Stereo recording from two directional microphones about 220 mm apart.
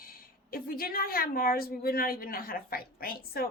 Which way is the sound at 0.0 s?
40° left (ahead or behind).